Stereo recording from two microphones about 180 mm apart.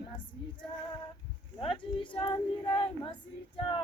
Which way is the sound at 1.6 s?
30° left (ahead or behind).